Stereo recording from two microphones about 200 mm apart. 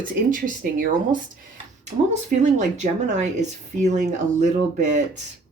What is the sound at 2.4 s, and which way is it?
Speech, 35° right (ahead or behind).